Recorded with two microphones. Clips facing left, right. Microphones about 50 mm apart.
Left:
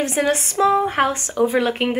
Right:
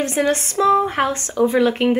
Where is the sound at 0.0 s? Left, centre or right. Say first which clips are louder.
Right 1 dB; centre.